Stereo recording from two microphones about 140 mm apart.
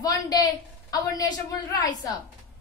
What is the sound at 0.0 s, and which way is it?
A woman's voice, 25° left (ahead or behind).